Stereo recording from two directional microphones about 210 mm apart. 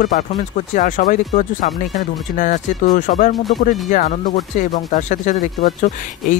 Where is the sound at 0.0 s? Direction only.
40° left (ahead or behind).